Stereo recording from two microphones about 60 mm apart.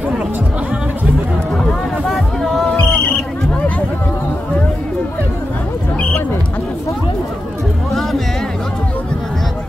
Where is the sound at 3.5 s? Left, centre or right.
Left.